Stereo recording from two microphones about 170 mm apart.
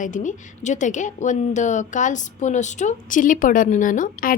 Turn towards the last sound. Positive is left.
turn(degrees=55)  # may be behind; listen again after turning